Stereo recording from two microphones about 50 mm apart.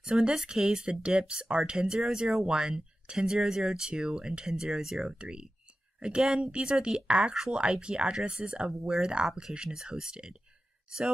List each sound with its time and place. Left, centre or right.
0.0 s speech: centre